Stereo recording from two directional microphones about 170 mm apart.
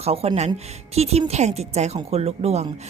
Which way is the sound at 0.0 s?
35° right (ahead or behind).